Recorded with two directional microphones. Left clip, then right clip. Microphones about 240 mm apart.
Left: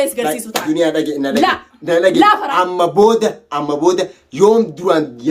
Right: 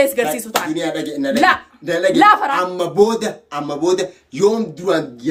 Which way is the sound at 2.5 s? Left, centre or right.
Centre.